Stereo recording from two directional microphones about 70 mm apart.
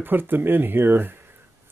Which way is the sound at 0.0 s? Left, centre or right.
Right.